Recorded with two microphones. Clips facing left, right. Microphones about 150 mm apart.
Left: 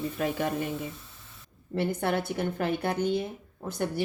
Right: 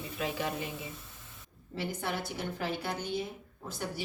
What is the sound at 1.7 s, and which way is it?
Speech, 60° left (ahead or behind).